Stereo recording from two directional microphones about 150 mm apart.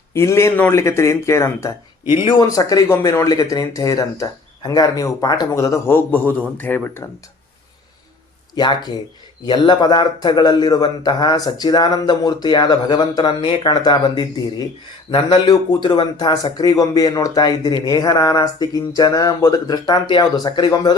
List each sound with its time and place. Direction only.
0.1 s speech: 20° left (ahead or behind)
2.1 s speech: 30° left (ahead or behind); by 7.1 s 15° left (ahead or behind)
8.5 s speech: 30° left (ahead or behind)